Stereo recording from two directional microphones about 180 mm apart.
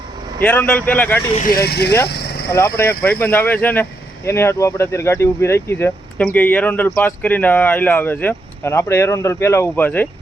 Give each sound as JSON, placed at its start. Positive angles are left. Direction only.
{"t": 0.3, "sound": "speech", "side_deg": 10}
{"t": 1.4, "sound": "speech", "side_deg": 55}
{"t": 2.0, "sound": "vehicle", "side_deg": 65}
{"t": 2.5, "sound": "speech", "side_deg": 15}